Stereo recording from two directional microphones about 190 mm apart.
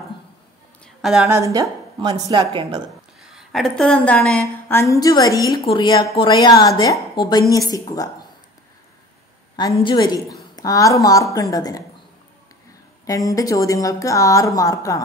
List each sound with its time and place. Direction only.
1.2 s a woman's voice: 15° right (ahead or behind)
3.2 s a woman's voice: centre (ahead or behind); by 8.1 s 20° left (ahead or behind)
9.8 s a woman's voice: 20° left (ahead or behind)
13.0 s a woman's voice: 20° left (ahead or behind)